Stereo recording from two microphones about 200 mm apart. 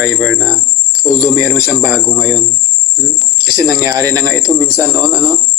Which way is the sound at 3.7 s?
15° right (ahead or behind).